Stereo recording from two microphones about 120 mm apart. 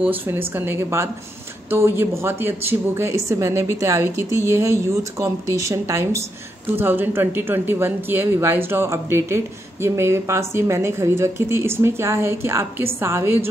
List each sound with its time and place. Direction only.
0.0 s speech: 15° right (ahead or behind)